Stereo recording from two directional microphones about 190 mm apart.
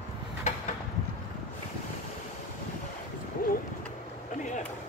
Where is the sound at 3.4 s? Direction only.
50° left (ahead or behind).